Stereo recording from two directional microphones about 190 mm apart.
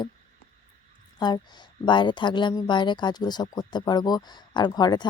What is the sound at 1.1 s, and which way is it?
Speech, 20° left (ahead or behind).